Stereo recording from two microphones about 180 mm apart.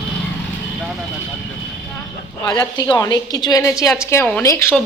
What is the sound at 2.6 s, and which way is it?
A woman's voice, 20° left (ahead or behind).